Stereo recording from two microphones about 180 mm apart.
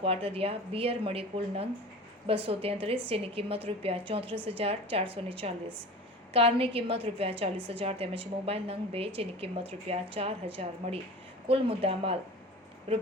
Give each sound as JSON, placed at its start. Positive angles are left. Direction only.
{"t": 0.0, "sound": "a woman's voice", "side_deg": -30}